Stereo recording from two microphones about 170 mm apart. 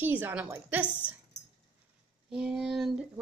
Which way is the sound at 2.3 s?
5° right (ahead or behind).